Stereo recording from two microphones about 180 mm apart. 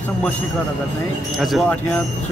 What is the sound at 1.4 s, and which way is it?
Speech, 5° left (ahead or behind).